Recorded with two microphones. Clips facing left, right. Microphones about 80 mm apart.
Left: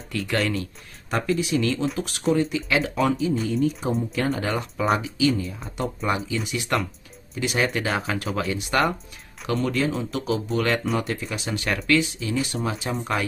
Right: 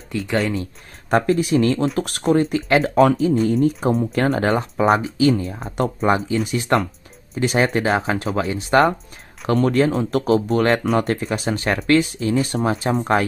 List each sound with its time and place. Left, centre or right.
0.1 s speech: right
1.1 s speech: right
9.5 s speech: right